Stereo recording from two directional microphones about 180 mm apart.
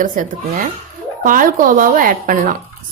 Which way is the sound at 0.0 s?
45° right (ahead or behind).